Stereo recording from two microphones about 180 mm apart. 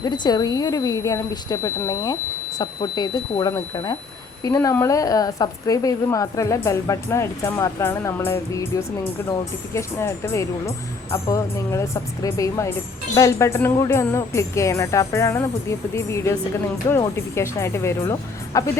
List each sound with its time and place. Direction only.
0.0 s a woman's voice: 25° left (ahead or behind)